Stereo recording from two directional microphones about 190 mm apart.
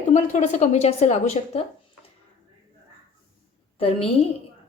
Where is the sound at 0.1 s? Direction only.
40° left (ahead or behind).